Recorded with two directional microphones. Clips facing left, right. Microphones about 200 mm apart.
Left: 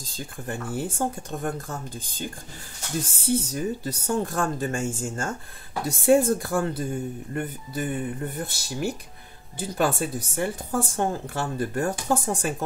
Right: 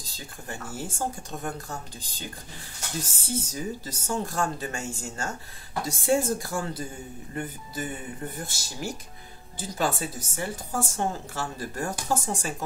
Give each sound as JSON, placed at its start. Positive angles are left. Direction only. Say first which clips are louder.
{"t": 0.0, "sound": "speech", "louder": "left 7 dB", "side_deg": 55}